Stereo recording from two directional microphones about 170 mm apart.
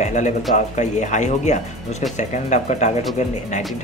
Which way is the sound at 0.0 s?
45° left (ahead or behind).